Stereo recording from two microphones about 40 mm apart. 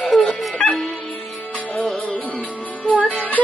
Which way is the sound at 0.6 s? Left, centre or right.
Left.